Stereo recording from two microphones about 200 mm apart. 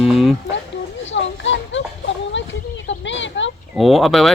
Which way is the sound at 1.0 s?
65° left (ahead or behind).